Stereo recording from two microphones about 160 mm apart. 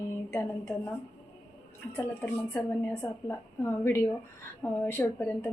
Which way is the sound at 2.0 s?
10° left (ahead or behind).